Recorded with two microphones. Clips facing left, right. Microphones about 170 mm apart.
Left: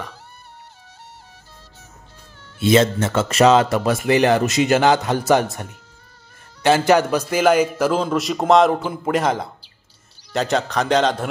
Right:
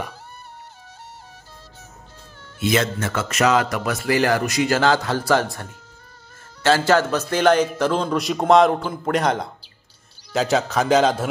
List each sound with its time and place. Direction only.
2.6 s a man's voice: 25° left (ahead or behind); by 11.2 s 5° right (ahead or behind)